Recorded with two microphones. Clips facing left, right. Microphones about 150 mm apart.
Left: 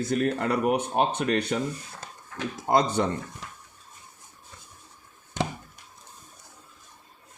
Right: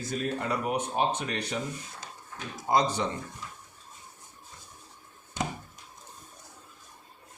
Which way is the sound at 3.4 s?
80° left.